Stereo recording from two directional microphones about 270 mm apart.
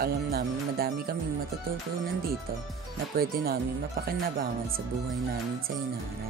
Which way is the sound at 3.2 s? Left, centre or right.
Right.